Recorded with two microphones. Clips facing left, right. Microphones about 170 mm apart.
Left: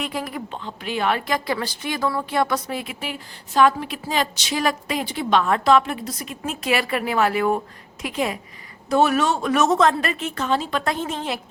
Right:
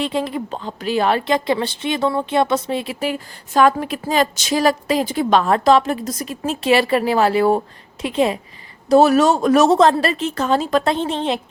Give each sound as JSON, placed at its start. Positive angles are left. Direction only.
{"t": 0.0, "sound": "speech", "side_deg": -25}
{"t": 0.6, "sound": "a woman's voice", "side_deg": -35}
{"t": 10.8, "sound": "speech", "side_deg": -30}